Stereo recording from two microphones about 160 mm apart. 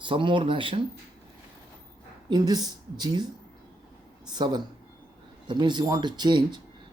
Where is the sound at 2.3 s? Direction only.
25° right (ahead or behind).